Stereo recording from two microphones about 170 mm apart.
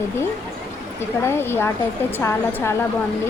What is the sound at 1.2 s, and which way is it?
Speech, 15° left (ahead or behind).